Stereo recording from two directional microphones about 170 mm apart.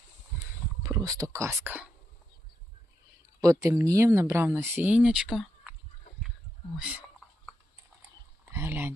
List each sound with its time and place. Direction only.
0.8 s speech: 20° right (ahead or behind)
3.4 s speech: 20° right (ahead or behind); by 5.5 s 5° right (ahead or behind)
6.7 s speech: 5° right (ahead or behind)
8.4 s speech: 15° right (ahead or behind)